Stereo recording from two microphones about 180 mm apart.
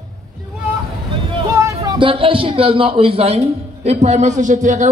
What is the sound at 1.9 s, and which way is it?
A man's voice, 30° right (ahead or behind).